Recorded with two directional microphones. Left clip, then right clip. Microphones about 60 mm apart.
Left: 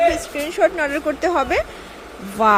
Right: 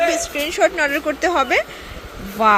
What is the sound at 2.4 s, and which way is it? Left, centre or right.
Speech, left.